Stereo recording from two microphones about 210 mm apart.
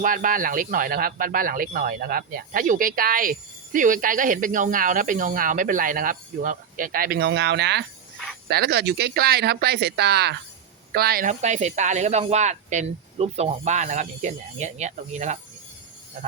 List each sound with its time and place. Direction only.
0.0 s speech: 40° right (ahead or behind)